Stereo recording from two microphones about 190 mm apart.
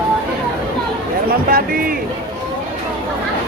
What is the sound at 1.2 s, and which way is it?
Music, 50° right (ahead or behind).